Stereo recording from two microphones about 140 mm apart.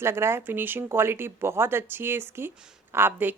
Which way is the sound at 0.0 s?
20° right (ahead or behind).